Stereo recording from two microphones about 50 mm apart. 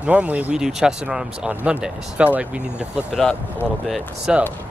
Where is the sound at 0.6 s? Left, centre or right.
Centre.